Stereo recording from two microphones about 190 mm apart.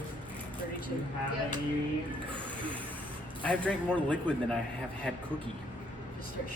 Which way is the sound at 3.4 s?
5° left (ahead or behind).